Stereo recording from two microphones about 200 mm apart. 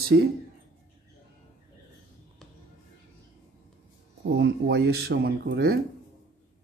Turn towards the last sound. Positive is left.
turn(degrees=-50)  # may be behind; listen again after turning